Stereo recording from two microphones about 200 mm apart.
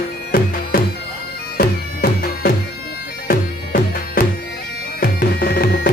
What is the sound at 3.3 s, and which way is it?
Music, 45° left (ahead or behind).